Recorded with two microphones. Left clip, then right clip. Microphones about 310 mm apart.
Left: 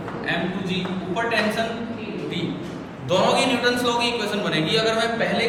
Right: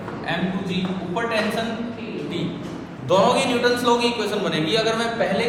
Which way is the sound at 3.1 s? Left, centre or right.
Centre.